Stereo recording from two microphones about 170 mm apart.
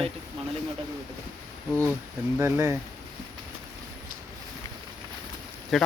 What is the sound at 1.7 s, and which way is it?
Speech, 5° left (ahead or behind).